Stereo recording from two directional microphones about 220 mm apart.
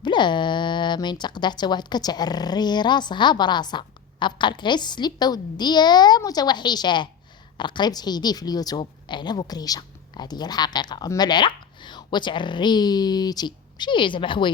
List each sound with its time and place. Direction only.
0.0 s speech: 20° left (ahead or behind)